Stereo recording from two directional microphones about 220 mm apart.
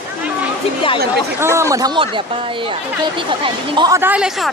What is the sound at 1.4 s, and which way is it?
Speech, 10° right (ahead or behind).